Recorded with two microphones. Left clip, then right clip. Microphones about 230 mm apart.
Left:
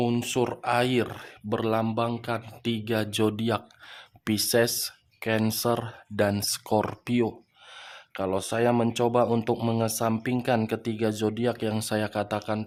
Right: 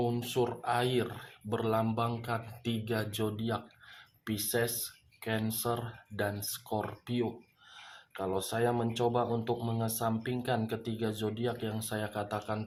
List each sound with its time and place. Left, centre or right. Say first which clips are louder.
0.0 s speech: left 5 dB; left